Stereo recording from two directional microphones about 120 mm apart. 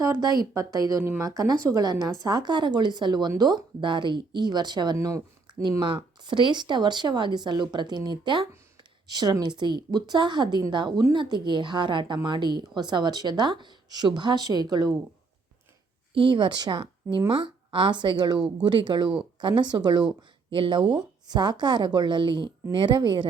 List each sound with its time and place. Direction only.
0.0 s a woman's voice: 30° right (ahead or behind)
4.9 s speech: 25° right (ahead or behind)
6.2 s a woman's voice: 40° right (ahead or behind)
16.1 s a woman's voice: 40° right (ahead or behind)